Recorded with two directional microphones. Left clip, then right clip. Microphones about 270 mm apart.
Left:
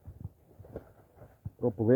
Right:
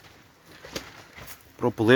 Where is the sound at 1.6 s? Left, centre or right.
Right.